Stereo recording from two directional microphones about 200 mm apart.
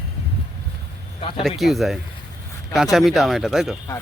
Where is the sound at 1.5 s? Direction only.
Centre (ahead or behind).